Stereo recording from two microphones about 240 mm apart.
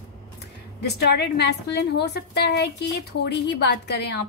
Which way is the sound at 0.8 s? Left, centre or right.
Left.